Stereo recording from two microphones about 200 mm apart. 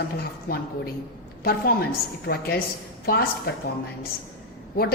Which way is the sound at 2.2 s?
50° left (ahead or behind).